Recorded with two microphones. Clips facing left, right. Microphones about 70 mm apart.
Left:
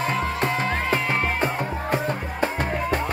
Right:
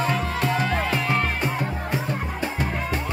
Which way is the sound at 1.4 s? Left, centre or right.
Left.